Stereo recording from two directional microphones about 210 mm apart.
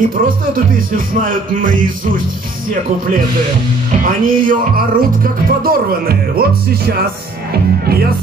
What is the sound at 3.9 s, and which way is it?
Music, 40° right (ahead or behind).